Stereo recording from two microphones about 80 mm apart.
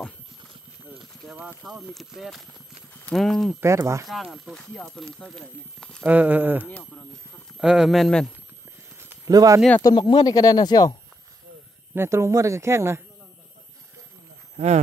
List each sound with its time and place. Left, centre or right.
1.6 s speech: centre
3.6 s speech: right
4.1 s speech: centre
6.0 s speech: right
7.5 s speech: centre
9.2 s speech: right
9.8 s speech: left
11.9 s speech: right